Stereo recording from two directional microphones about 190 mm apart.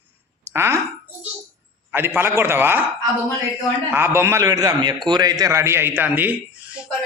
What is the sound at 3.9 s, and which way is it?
Speech, 15° right (ahead or behind).